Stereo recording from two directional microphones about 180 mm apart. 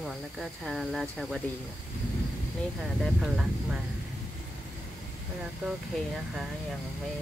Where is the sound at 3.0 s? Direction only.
5° right (ahead or behind).